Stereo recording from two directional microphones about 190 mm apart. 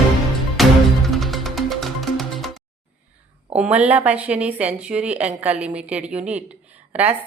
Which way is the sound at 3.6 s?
5° right (ahead or behind).